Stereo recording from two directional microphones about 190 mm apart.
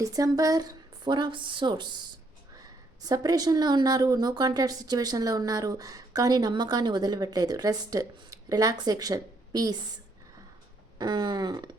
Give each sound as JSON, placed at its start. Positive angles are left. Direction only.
{"t": 0.0, "sound": "speech", "side_deg": -20}
{"t": 3.1, "sound": "speech", "side_deg": -20}
{"t": 10.9, "sound": "speech", "side_deg": -20}